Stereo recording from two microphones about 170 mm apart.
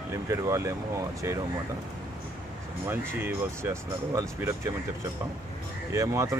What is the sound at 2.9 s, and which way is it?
Speech, 15° right (ahead or behind).